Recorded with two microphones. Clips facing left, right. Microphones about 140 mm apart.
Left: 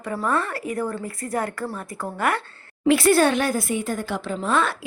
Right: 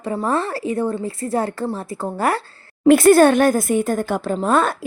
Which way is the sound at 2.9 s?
50° right (ahead or behind).